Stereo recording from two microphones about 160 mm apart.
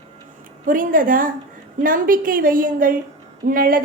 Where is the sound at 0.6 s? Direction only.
60° right (ahead or behind).